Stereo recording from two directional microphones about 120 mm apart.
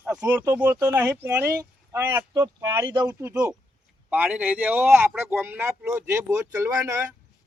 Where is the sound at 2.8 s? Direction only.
40° right (ahead or behind).